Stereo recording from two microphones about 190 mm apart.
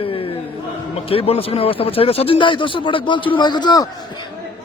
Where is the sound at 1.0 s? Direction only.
30° left (ahead or behind).